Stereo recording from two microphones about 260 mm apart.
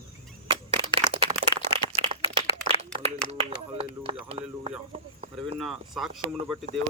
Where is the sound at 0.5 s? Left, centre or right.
Centre.